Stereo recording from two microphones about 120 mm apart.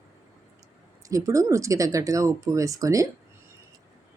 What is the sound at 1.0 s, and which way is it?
Speech, 25° right (ahead or behind).